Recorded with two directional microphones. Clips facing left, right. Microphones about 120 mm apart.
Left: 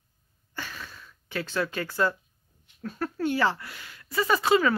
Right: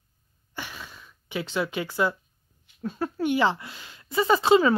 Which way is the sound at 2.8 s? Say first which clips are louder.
Right 2 dB; 15° right (ahead or behind).